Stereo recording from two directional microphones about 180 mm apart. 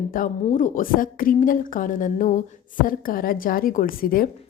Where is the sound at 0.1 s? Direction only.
50° left (ahead or behind).